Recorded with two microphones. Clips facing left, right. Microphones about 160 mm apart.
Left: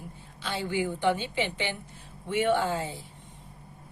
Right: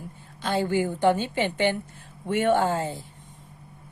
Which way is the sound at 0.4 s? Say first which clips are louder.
Right 6 dB; 45° right (ahead or behind).